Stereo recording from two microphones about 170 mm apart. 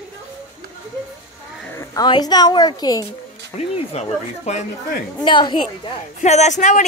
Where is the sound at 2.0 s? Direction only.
25° left (ahead or behind).